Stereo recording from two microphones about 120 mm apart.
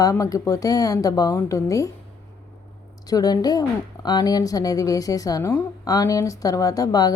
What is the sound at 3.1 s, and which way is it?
A woman's voice, 30° left (ahead or behind).